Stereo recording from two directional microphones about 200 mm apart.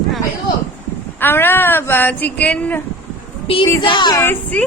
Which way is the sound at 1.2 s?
10° left (ahead or behind).